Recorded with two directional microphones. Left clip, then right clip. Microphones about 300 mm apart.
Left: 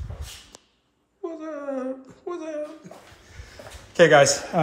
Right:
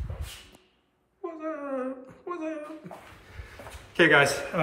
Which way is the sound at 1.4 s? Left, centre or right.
Centre.